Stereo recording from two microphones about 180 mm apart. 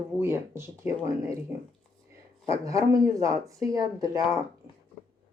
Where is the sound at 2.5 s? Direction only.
15° right (ahead or behind).